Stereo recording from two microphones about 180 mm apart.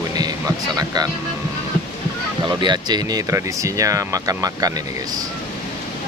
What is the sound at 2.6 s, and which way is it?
Speech, 25° right (ahead or behind).